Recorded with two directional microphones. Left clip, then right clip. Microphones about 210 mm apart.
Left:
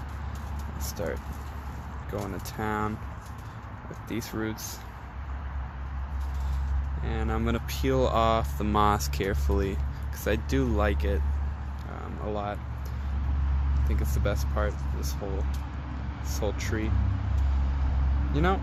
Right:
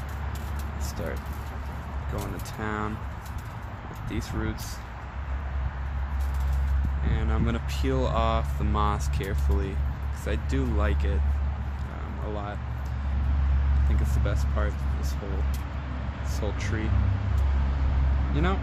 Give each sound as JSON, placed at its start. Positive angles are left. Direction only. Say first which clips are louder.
{"t": 2.6, "sound": "speech", "louder": "left 2 dB", "side_deg": 45}
{"t": 4.1, "sound": "speech", "louder": "left 1 dB", "side_deg": 45}
{"t": 7.1, "sound": "speech", "louder": "left 2 dB", "side_deg": 45}
{"t": 12.3, "sound": "speech", "louder": "left 4 dB", "side_deg": 45}
{"t": 14.0, "sound": "speech", "louder": "left 4 dB", "side_deg": 45}
{"t": 16.3, "sound": "speech", "louder": "left 2 dB", "side_deg": 45}
{"t": 18.4, "sound": "speech", "louder": "left 2 dB", "side_deg": 45}